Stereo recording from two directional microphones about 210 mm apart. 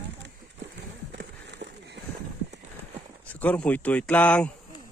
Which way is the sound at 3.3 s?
5° left (ahead or behind).